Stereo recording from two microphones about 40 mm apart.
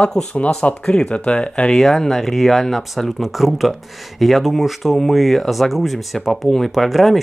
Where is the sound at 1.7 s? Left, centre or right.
Centre.